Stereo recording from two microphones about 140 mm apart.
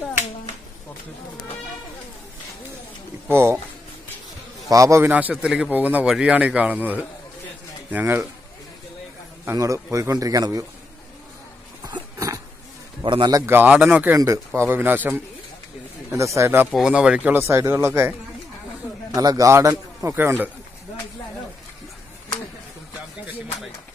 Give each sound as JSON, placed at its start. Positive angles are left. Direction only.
{"t": 3.3, "sound": "a man's voice", "side_deg": -15}
{"t": 4.6, "sound": "a man's voice", "side_deg": -25}
{"t": 5.1, "sound": "a man's voice", "side_deg": -10}
{"t": 9.4, "sound": "a man's voice", "side_deg": -20}
{"t": 11.8, "sound": "a sound", "side_deg": -25}
{"t": 13.0, "sound": "a man's voice", "side_deg": -35}
{"t": 13.5, "sound": "a man's voice", "side_deg": -15}
{"t": 14.1, "sound": "a man's voice", "side_deg": -20}
{"t": 16.7, "sound": "a man's voice", "side_deg": -5}
{"t": 19.1, "sound": "a man's voice", "side_deg": -25}